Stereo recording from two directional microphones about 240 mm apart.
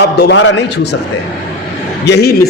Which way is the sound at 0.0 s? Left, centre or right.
Left.